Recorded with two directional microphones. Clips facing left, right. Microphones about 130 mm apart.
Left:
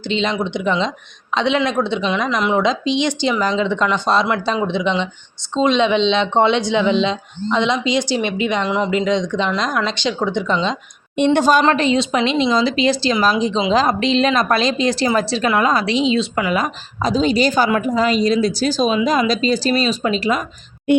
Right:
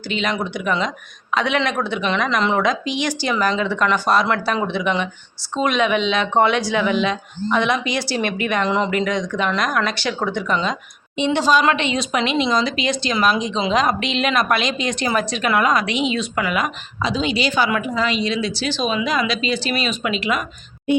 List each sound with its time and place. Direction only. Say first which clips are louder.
0.1 s speech: left 3 dB; 25° left (ahead or behind)
8.6 s speech: even; 10° left (ahead or behind)
8.9 s speech: left 3 dB; 20° left (ahead or behind)
11.3 s a woman's voice: left 1 dB; 50° left (ahead or behind)
11.6 s speech: left 4 dB; 35° left (ahead or behind)